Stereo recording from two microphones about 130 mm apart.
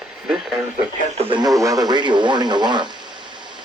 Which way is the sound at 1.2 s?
45° right (ahead or behind).